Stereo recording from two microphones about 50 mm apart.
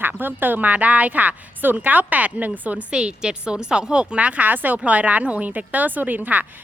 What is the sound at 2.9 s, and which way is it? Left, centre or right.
A woman's voice, centre.